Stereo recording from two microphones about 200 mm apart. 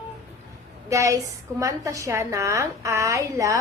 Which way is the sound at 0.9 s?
15° right (ahead or behind).